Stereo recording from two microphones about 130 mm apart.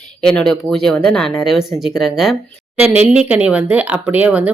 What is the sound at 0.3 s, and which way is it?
Speech, 5° left (ahead or behind).